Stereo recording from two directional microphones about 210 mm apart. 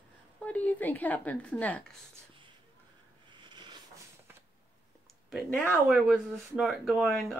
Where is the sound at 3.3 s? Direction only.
20° right (ahead or behind).